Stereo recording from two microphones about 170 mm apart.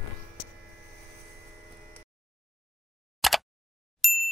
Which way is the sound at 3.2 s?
Centre (ahead or behind).